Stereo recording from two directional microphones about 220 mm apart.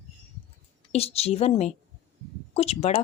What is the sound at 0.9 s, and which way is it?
Speech, 30° left (ahead or behind).